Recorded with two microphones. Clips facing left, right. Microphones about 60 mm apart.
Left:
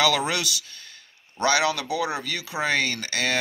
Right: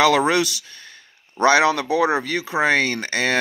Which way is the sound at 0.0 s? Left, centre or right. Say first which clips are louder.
Right 6 dB; right.